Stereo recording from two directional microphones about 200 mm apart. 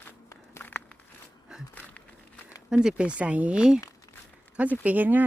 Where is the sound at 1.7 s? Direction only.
5° left (ahead or behind).